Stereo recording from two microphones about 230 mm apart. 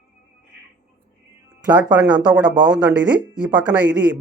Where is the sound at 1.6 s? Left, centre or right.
Centre.